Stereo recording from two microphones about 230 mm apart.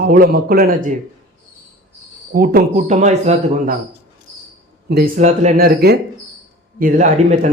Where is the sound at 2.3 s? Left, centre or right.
Right.